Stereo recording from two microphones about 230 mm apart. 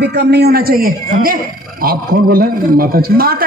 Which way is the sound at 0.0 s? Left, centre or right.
Right.